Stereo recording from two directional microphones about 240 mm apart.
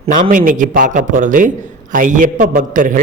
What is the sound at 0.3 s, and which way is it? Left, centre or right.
A man's voice, right.